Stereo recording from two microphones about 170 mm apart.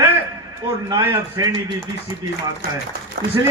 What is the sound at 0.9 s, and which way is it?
Speech, 25° right (ahead or behind).